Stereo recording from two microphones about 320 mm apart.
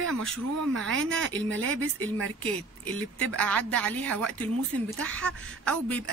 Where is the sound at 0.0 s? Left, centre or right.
Right.